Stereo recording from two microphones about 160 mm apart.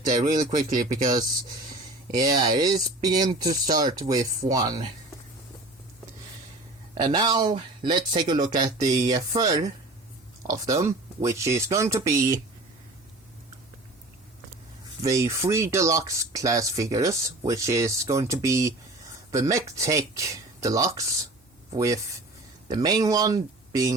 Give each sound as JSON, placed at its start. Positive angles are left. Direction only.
{"t": 0.5, "sound": "speech", "side_deg": -60}
{"t": 2.1, "sound": "speech", "side_deg": -25}
{"t": 6.9, "sound": "speech", "side_deg": -25}
{"t": 15.0, "sound": "speech", "side_deg": -20}